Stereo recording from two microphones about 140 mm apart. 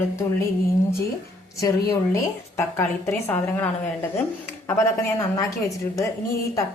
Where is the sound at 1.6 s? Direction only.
20° left (ahead or behind).